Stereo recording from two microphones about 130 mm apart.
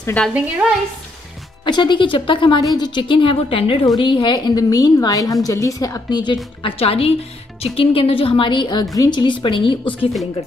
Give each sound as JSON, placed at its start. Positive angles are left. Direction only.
{"t": 0.3, "sound": "speech", "side_deg": -10}
{"t": 1.6, "sound": "a woman's voice", "side_deg": 35}